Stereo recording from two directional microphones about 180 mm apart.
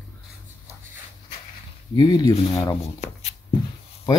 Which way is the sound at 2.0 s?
25° left (ahead or behind).